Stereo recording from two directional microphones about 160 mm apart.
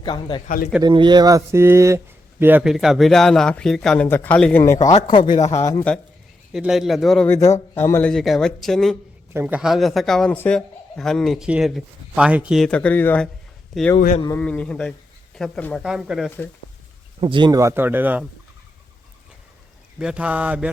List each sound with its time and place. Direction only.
0.0 s a man's voice: 30° left (ahead or behind)
0.4 s speech: 60° left (ahead or behind)
0.8 s a man's voice: 30° right (ahead or behind); by 4.6 s 5° left (ahead or behind)
4.6 s a man's voice: 20° left (ahead or behind)
5.2 s speech: 55° left (ahead or behind)
5.5 s a man's voice: 20° left (ahead or behind)
6.5 s a man's voice: centre (ahead or behind)
7.3 s speech: 20° left (ahead or behind)
8.1 s a man's voice: centre (ahead or behind)
9.3 s a man's voice: 15° right (ahead or behind)
9.6 s a man's voice: centre (ahead or behind)
17.2 s speech: 30° right (ahead or behind); by 18.3 s 10° right (ahead or behind)
20.0 s speech: 5° right (ahead or behind)